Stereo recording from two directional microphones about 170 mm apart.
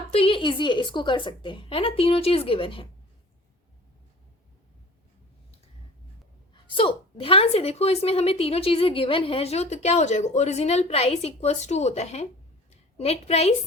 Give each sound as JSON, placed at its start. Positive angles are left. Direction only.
{"t": 0.1, "sound": "a woman's voice", "side_deg": 35}
{"t": 6.5, "sound": "a woman's voice", "side_deg": 30}